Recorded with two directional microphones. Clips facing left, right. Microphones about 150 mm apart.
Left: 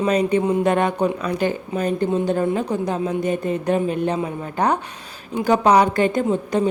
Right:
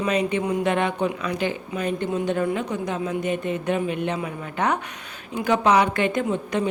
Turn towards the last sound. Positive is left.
turn(degrees=35)  # may be behind; listen again after turning